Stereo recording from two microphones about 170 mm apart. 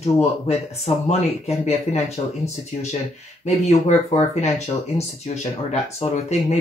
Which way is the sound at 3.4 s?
40° left (ahead or behind).